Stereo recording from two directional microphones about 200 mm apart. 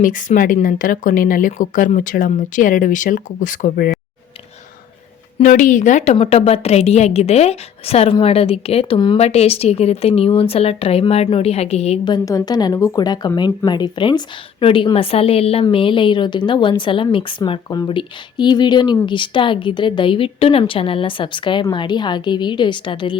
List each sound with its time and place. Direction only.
0.0 s a woman's voice: 40° left (ahead or behind)
5.4 s a woman's voice: 40° left (ahead or behind)